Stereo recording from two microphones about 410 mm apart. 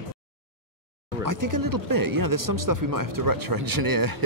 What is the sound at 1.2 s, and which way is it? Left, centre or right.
Speech, right.